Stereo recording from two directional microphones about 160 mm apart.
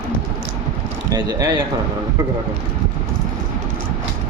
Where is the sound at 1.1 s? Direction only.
25° right (ahead or behind).